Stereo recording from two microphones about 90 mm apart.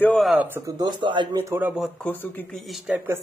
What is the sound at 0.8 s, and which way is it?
Speech, 60° right (ahead or behind).